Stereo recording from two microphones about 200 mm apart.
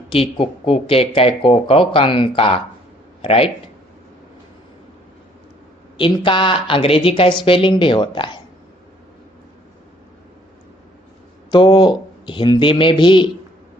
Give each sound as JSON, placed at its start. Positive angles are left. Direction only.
{"t": 0.1, "sound": "speech", "side_deg": 30}
{"t": 6.0, "sound": "speech", "side_deg": 25}
{"t": 11.5, "sound": "speech", "side_deg": 25}